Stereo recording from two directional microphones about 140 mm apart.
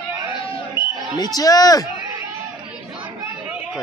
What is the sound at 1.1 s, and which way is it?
Speech, 25° left (ahead or behind).